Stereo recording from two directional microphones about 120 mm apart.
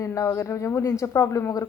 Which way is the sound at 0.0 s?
25° left (ahead or behind).